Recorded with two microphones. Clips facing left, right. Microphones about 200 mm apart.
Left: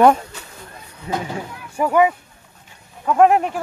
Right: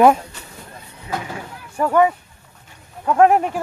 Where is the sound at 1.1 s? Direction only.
35° left (ahead or behind).